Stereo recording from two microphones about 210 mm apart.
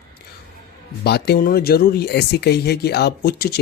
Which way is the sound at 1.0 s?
50° left (ahead or behind).